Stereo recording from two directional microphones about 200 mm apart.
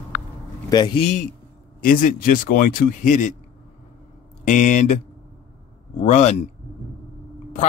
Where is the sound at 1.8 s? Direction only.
45° left (ahead or behind).